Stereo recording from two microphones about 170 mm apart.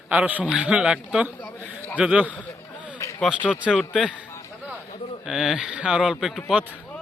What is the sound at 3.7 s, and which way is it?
A man's voice, 5° left (ahead or behind).